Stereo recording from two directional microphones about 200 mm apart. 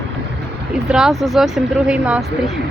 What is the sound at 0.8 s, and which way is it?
Speech, 5° right (ahead or behind).